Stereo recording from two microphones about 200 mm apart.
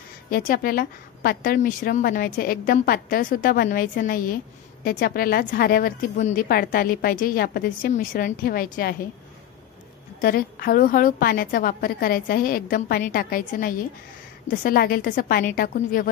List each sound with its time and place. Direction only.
0.3 s a woman's voice: 45° left (ahead or behind)
10.2 s a woman's voice: 45° left (ahead or behind)